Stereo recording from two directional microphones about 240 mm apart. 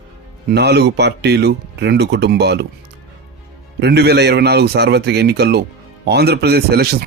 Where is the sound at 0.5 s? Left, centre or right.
Right.